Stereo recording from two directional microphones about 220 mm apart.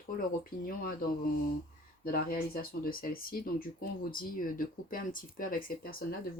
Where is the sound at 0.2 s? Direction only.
40° left (ahead or behind).